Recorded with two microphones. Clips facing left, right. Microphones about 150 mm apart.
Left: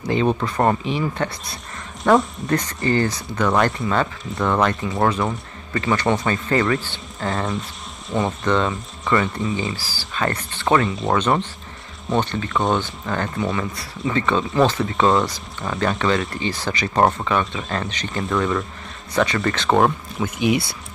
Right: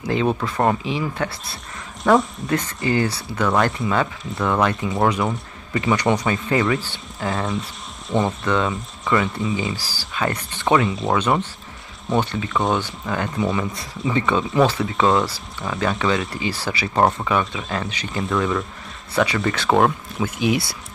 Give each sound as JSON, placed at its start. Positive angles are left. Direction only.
{"t": 0.1, "sound": "speech", "side_deg": 0}
{"t": 9.8, "sound": "speech", "side_deg": -15}
{"t": 10.7, "sound": "speech", "side_deg": 0}
{"t": 13.7, "sound": "speech", "side_deg": -15}
{"t": 14.6, "sound": "speech", "side_deg": 0}